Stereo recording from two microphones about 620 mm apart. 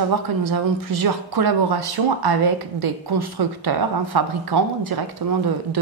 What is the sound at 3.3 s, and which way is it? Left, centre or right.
A woman's voice, right.